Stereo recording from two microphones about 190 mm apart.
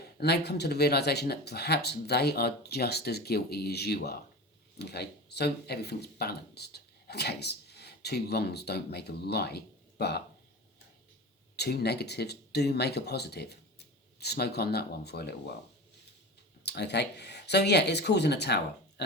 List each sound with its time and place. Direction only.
0.2 s speech: 60° left (ahead or behind)
11.5 s speech: 60° left (ahead or behind)
16.6 s speech: 60° left (ahead or behind)